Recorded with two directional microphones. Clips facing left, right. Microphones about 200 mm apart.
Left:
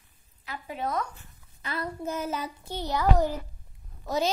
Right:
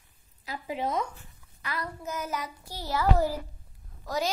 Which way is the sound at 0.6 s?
25° right (ahead or behind).